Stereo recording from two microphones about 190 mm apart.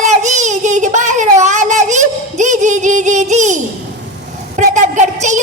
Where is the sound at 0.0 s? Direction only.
40° right (ahead or behind).